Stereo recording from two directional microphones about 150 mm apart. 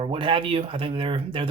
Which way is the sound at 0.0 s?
35° right (ahead or behind).